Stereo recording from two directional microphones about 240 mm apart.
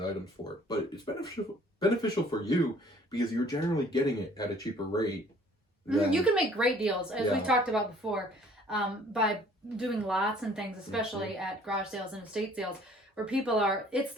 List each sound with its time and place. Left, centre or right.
0.7 s speech: centre
5.9 s a woman's voice: centre